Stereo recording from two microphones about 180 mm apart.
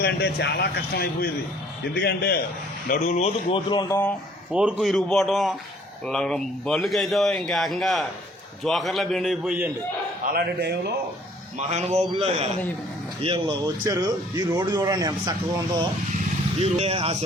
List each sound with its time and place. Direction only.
0.0 s speech: 70° left (ahead or behind)
2.9 s speech: 40° left (ahead or behind)
3.7 s speech: 20° left (ahead or behind)
4.5 s a man's voice: 5° right (ahead or behind)
10.2 s a man's voice: 60° right (ahead or behind)
11.5 s a man's voice: 35° right (ahead or behind)
13.8 s speech: 20° right (ahead or behind)
16.6 s a man's voice: 35° right (ahead or behind)